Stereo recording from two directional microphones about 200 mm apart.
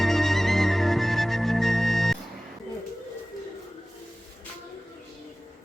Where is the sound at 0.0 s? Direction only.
Centre (ahead or behind).